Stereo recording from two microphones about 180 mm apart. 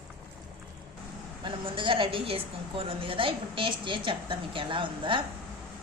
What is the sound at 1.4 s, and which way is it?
A woman's voice, 25° right (ahead or behind).